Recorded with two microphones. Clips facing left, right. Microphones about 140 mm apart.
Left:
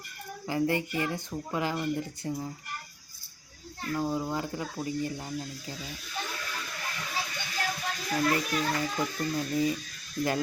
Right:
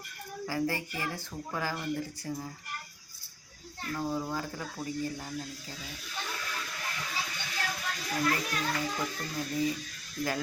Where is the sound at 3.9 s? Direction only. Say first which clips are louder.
Left 3 dB; 15° left (ahead or behind).